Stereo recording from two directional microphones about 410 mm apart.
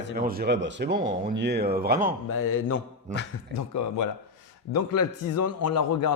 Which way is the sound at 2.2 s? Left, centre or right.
Left.